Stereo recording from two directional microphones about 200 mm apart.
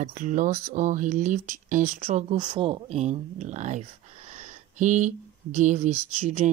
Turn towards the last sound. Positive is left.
turn(degrees=-35)  # may be behind; listen again after turning